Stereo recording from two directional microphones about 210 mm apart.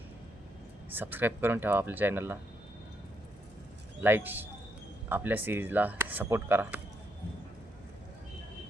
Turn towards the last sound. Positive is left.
turn(degrees=-10)  # may be behind; listen again after turning